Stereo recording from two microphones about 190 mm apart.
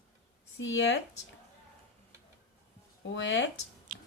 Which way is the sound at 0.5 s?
75° left (ahead or behind).